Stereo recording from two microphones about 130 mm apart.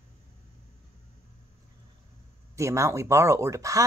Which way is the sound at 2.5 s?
25° right (ahead or behind).